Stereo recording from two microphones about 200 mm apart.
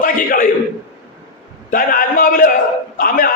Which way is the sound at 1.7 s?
45° left (ahead or behind).